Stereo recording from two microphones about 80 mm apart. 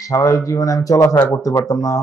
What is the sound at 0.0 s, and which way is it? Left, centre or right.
Speech, left.